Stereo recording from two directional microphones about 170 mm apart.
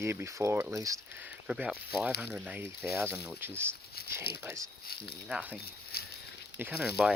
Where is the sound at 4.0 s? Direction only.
65° left (ahead or behind).